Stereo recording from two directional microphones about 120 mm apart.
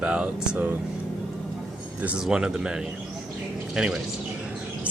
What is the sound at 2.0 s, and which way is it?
Speech, 5° right (ahead or behind).